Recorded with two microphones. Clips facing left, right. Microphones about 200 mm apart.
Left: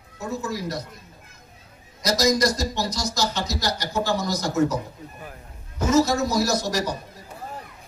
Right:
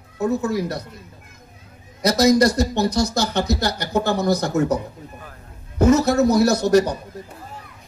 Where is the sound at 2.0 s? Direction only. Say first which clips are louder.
Right 6 dB; 60° right (ahead or behind).